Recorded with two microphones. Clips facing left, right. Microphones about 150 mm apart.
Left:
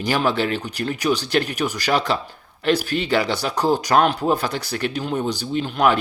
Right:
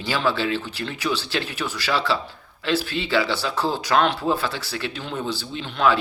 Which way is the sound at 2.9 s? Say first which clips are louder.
Left 4 dB; 55° left (ahead or behind).